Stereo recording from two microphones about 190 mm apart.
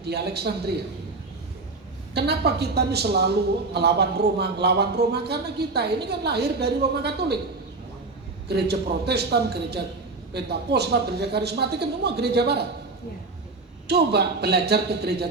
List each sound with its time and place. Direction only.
0.0 s a woman's voice: 60° right (ahead or behind)
2.1 s a woman's voice: 60° right (ahead or behind)
8.4 s a woman's voice: 60° right (ahead or behind)
13.8 s a woman's voice: 60° right (ahead or behind)